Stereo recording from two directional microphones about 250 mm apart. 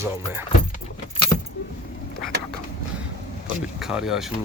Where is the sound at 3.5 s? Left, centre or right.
Centre.